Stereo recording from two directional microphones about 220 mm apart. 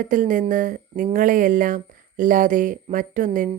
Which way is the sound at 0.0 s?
35° right (ahead or behind).